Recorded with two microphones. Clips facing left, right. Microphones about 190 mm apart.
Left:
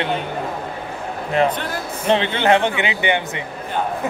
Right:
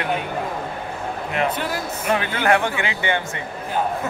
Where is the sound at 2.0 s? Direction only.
25° left (ahead or behind).